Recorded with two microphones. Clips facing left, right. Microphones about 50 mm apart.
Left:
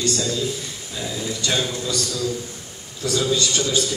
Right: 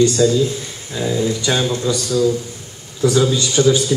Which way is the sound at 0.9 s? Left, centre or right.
Right.